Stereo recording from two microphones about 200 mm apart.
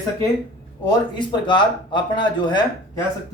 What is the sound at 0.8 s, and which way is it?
Speech, 25° left (ahead or behind).